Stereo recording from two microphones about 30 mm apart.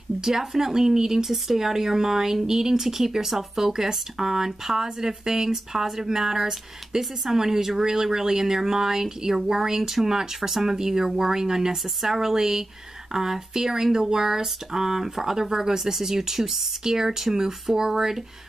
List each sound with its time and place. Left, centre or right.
0.2 s speech: centre
11.8 s speech: centre